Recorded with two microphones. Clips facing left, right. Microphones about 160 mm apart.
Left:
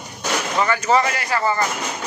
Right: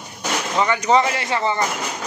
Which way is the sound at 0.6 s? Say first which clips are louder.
Right 1 dB; 20° right (ahead or behind).